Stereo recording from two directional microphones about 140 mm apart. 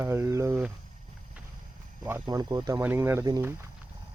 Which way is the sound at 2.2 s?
30° right (ahead or behind).